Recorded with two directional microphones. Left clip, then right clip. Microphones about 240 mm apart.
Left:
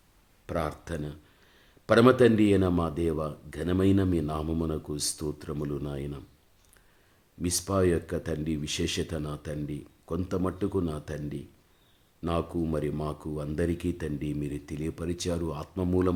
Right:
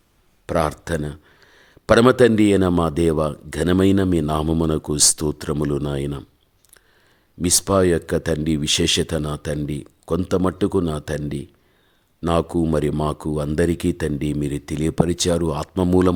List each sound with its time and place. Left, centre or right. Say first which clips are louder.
0.4 s speech: right 11 dB; right
7.4 s speech: right 9 dB; right